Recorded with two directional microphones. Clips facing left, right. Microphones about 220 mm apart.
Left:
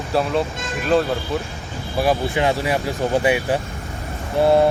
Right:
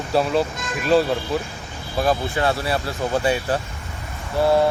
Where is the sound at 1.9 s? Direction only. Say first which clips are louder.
Left 2 dB; 15° left (ahead or behind).